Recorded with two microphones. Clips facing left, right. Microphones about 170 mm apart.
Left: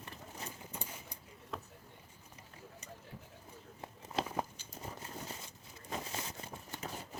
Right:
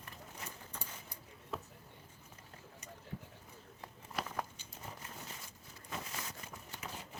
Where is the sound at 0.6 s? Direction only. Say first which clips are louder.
Left 3 dB; 15° left (ahead or behind).